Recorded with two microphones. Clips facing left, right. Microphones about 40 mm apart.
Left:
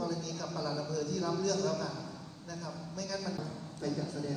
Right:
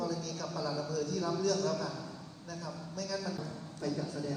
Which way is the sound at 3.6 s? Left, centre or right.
Right.